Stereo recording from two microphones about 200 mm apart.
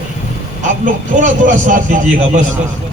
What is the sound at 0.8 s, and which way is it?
A man's voice, 40° right (ahead or behind).